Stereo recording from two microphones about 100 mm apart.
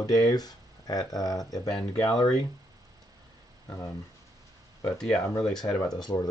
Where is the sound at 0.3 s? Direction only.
40° left (ahead or behind).